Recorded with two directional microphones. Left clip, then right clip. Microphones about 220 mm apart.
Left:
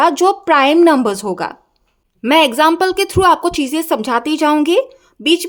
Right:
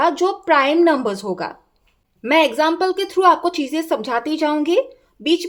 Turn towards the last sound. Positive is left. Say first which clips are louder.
# left 4 dB
turn(degrees=20)  # may be behind; listen again after turning